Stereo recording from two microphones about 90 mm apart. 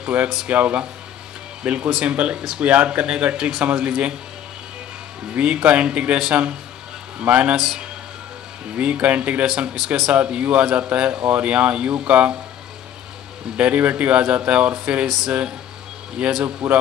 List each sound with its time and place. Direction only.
0.0 s speech: 15° right (ahead or behind)
5.3 s speech: 10° right (ahead or behind)
8.7 s speech: 15° right (ahead or behind)
13.6 s speech: 15° right (ahead or behind)